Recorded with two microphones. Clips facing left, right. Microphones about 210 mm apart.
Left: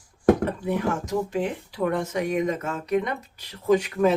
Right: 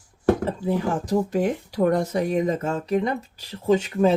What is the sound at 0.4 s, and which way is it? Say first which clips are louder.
Speech: right 1 dB; 30° right (ahead or behind).